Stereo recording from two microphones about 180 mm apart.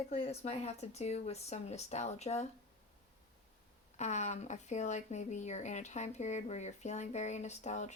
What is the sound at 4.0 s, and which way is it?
A woman's voice, 40° left (ahead or behind).